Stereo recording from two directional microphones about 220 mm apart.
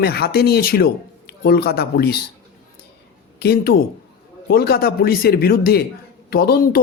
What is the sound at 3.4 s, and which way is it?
Speech, 45° left (ahead or behind).